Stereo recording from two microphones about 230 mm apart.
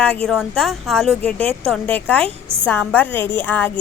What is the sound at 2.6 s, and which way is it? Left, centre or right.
A woman's voice, centre.